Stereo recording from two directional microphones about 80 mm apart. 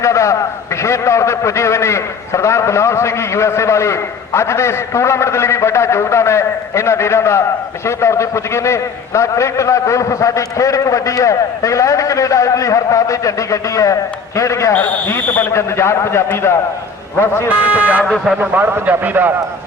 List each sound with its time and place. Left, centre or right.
0.0 s a man's voice: left
14.7 s speech: left
15.5 s a man's voice: left
17.7 s a man's voice: centre